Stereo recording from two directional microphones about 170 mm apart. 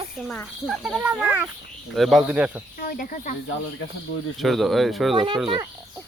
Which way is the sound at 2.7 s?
60° left (ahead or behind).